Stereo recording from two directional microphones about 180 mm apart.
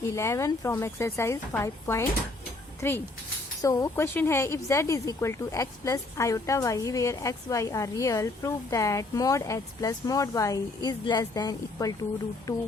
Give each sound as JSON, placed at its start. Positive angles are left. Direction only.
{"t": 0.0, "sound": "speech", "side_deg": 15}